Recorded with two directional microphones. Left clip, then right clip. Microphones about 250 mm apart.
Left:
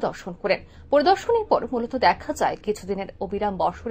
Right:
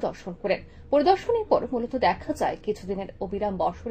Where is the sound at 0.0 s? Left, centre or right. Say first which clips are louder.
Left 3 dB; centre.